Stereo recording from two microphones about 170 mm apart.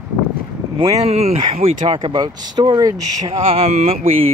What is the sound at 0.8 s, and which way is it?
Speech, 40° right (ahead or behind).